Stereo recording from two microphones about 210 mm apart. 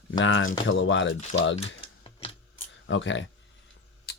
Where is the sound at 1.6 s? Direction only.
25° left (ahead or behind).